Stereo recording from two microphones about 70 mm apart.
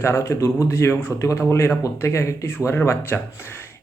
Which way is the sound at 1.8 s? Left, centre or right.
Left.